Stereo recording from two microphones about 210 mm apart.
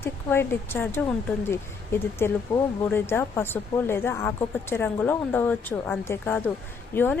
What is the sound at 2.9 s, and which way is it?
Speech, 10° left (ahead or behind).